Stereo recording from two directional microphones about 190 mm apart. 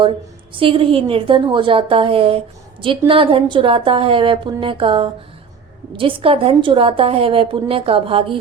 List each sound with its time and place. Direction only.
0.5 s a woman's voice: 25° right (ahead or behind)